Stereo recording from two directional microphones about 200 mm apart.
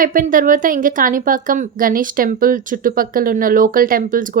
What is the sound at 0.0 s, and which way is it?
A woman's voice, 45° right (ahead or behind).